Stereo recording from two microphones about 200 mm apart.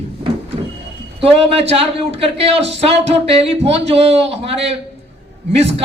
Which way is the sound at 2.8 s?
30° right (ahead or behind).